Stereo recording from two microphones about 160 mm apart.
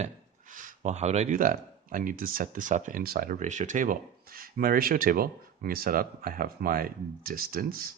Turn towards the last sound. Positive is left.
turn(degrees=-65)  # may be behind; listen again after turning